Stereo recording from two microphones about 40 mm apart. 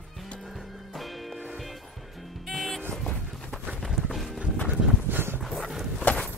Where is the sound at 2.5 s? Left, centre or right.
Centre.